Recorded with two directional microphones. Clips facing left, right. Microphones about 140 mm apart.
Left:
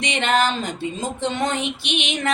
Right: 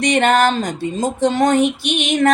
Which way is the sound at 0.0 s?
45° right (ahead or behind).